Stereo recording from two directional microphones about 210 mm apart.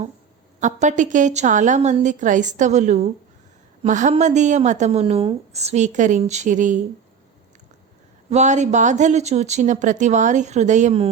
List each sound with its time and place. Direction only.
0.6 s a woman's voice: 35° right (ahead or behind)
8.3 s a woman's voice: 35° right (ahead or behind)